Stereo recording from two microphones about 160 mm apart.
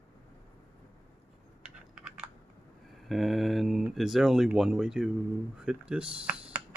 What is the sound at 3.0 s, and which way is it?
Speech, centre (ahead or behind).